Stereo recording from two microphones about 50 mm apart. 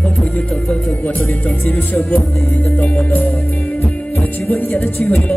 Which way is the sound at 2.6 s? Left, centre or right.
Left.